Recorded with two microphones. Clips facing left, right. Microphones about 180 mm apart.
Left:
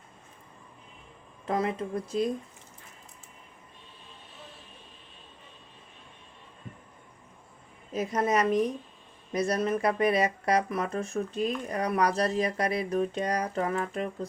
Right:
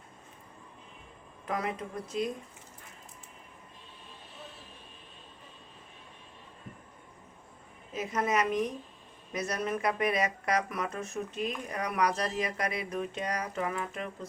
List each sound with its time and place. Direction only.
1.5 s speech: 30° left (ahead or behind)
7.9 s speech: 35° left (ahead or behind)